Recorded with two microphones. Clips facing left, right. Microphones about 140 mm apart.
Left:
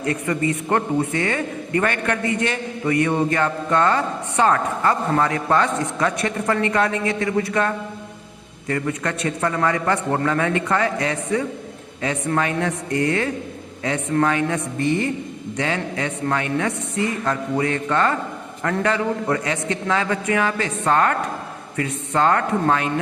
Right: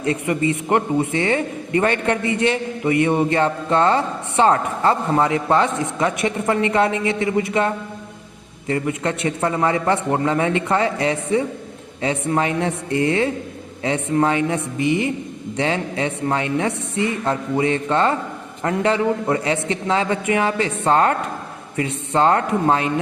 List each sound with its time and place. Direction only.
0.0 s speech: 20° right (ahead or behind)